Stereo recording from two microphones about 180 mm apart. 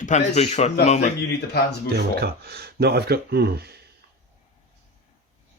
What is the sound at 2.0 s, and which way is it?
Speech, 60° right (ahead or behind).